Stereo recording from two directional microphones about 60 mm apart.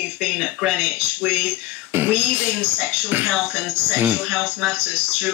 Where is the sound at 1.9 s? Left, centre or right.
Right.